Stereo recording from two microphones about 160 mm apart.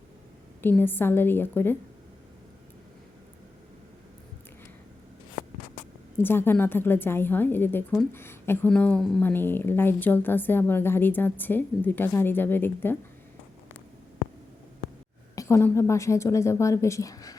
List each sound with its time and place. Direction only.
0.6 s a woman's voice: 10° left (ahead or behind)
6.1 s a woman's voice: 15° left (ahead or behind)
15.4 s a woman's voice: 15° left (ahead or behind)